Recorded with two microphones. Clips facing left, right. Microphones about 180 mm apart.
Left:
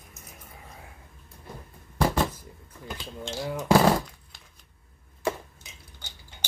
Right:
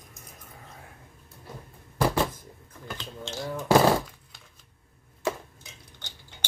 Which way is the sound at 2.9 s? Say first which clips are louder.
Left 2 dB; 10° left (ahead or behind).